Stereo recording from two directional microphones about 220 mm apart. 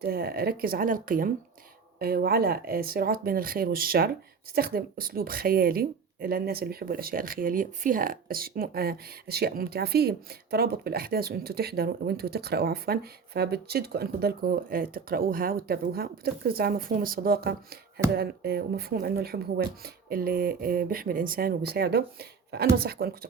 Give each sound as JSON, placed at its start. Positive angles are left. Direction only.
{"t": 0.0, "sound": "speech", "side_deg": -45}